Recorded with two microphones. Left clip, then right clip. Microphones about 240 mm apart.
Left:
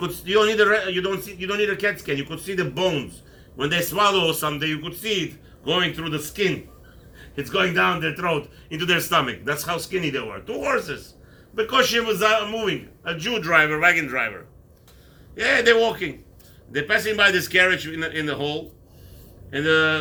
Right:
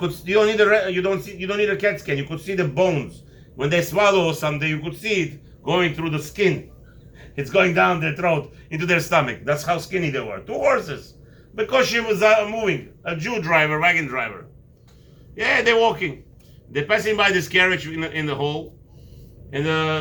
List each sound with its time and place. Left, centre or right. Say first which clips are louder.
0.0 s a man's voice: right 1 dB; centre
15.4 s a man's voice: even; centre